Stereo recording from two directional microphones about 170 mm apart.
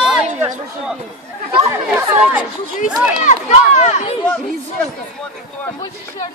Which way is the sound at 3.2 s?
40° left (ahead or behind).